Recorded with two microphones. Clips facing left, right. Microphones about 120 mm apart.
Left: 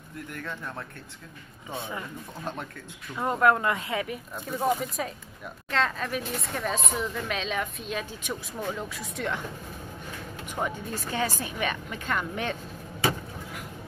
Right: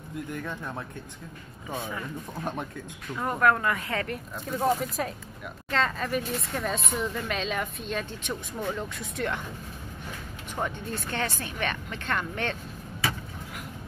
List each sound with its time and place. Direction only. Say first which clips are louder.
0.3 s speech: even; 15° right (ahead or behind)
1.7 s a woman's voice: right 1 dB; 25° left (ahead or behind)
3.2 s a woman's voice: left 1 dB; 20° left (ahead or behind)
4.0 s speech: even; centre (ahead or behind)
10.5 s a woman's voice: even; 5° left (ahead or behind)